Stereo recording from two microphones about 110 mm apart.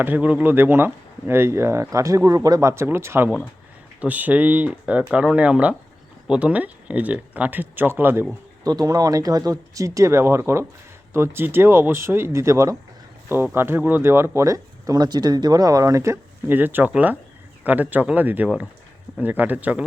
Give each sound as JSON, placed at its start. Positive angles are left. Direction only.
{"t": 0.0, "sound": "speech", "side_deg": -15}
{"t": 8.6, "sound": "speech", "side_deg": -35}